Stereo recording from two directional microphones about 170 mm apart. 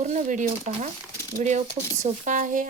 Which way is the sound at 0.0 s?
45° right (ahead or behind).